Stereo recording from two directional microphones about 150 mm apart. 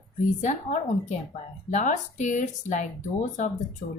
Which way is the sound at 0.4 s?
50° left (ahead or behind).